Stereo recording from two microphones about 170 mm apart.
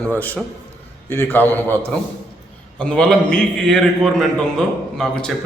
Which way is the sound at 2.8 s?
5° left (ahead or behind).